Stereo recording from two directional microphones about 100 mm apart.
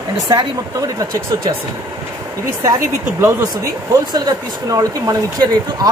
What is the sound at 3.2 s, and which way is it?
Speech, 30° right (ahead or behind).